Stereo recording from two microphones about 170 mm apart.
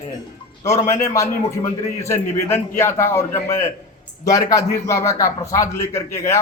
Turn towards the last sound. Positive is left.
turn(degrees=15)  # may be behind; listen again after turning